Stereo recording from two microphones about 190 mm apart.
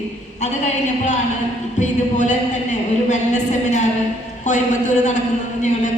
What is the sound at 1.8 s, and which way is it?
A woman's voice, 40° left (ahead or behind).